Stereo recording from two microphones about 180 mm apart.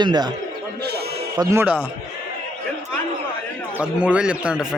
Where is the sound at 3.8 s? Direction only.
5° right (ahead or behind).